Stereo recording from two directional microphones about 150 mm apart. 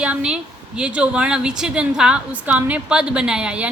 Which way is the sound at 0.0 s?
5° right (ahead or behind).